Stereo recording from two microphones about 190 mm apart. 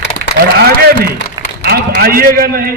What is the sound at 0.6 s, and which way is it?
A man's voice, 55° right (ahead or behind).